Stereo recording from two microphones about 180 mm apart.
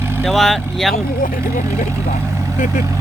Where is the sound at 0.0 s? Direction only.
15° right (ahead or behind).